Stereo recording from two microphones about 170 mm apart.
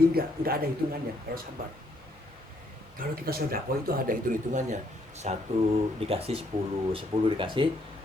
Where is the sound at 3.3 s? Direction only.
60° right (ahead or behind).